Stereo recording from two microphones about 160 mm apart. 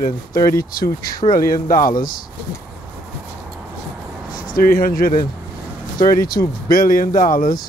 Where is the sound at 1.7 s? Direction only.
60° left (ahead or behind).